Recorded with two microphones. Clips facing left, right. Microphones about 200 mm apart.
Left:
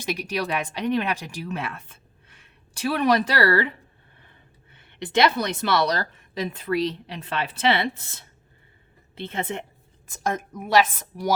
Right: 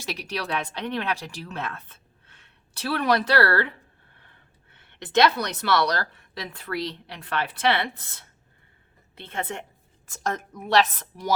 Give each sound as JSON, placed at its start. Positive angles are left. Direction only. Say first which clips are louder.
{"t": 0.0, "sound": "speech", "louder": "left 5 dB", "side_deg": 15}
{"t": 5.1, "sound": "a woman's voice", "louder": "even", "side_deg": 20}
{"t": 10.1, "sound": "a woman's voice", "louder": "left 2 dB", "side_deg": 10}